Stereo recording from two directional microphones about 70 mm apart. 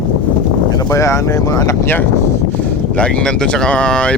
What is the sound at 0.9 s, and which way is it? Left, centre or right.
Speech, left.